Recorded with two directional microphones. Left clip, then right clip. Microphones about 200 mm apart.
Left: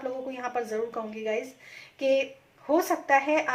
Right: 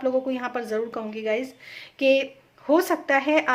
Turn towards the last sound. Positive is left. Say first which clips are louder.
# right 2 dB
turn(degrees=-40)  # may be behind; listen again after turning